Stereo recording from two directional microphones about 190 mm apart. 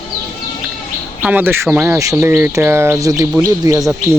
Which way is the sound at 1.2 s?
10° right (ahead or behind).